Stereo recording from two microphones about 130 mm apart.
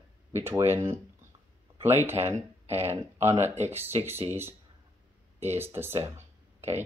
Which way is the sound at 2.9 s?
55° right (ahead or behind).